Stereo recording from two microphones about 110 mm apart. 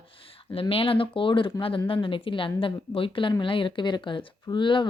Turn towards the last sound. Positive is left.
turn(degrees=45)  # may be behind; listen again after turning